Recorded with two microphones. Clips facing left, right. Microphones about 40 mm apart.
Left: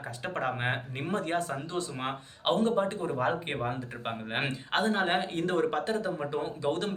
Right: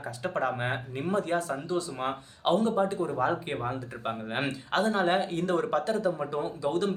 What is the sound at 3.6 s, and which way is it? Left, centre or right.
Speech, left.